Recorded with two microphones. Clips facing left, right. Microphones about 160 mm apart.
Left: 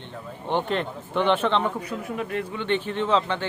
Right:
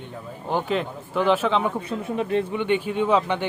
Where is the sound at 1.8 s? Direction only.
25° right (ahead or behind).